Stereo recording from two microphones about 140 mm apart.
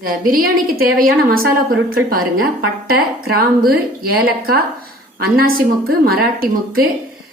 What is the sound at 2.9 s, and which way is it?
A woman's voice, 90° right.